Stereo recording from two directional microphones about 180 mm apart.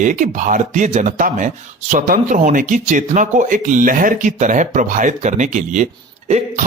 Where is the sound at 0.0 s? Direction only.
45° right (ahead or behind).